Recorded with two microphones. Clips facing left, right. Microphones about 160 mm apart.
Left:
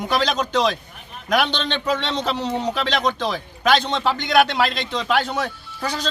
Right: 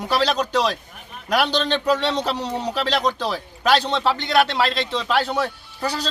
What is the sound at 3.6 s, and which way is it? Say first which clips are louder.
Speech: even; 35° right (ahead or behind).